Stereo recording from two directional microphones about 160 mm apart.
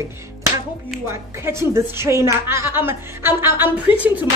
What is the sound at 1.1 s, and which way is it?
Speech, 15° right (ahead or behind).